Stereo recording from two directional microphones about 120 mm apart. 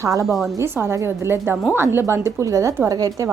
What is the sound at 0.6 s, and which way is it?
A woman's voice, 20° right (ahead or behind).